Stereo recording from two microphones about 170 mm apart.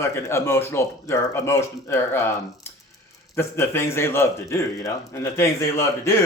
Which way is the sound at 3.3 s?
15° left (ahead or behind).